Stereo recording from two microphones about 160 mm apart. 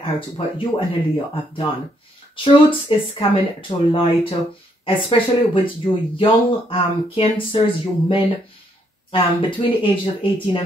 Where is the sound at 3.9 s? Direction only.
35° left (ahead or behind).